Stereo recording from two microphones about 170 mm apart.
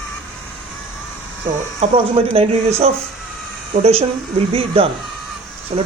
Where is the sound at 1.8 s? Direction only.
35° right (ahead or behind).